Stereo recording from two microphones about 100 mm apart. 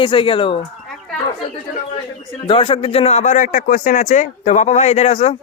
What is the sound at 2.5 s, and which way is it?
Speech, 65° left (ahead or behind).